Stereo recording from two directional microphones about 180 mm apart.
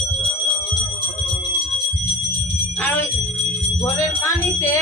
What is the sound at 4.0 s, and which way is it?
Speech, 15° left (ahead or behind).